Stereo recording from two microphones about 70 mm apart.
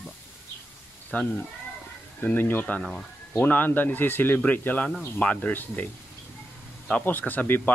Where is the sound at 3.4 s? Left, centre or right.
Left.